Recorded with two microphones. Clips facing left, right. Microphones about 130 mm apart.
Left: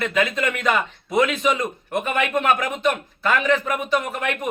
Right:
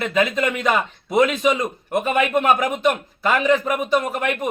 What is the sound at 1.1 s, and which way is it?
Speech, 10° right (ahead or behind).